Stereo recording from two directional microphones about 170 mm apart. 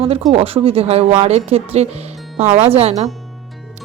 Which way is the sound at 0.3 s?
35° right (ahead or behind).